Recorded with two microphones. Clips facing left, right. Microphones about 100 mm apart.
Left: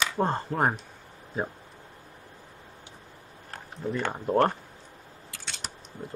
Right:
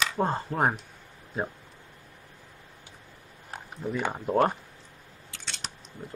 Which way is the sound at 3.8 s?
5° right (ahead or behind).